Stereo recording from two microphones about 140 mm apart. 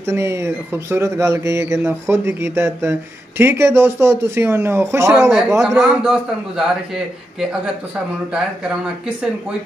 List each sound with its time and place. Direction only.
0.0 s speech: 20° right (ahead or behind)
5.8 s a man's voice: 5° right (ahead or behind)